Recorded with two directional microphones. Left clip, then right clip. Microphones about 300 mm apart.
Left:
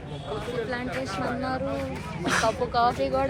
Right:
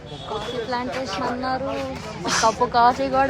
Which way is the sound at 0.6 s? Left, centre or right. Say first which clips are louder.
Right 5 dB; right.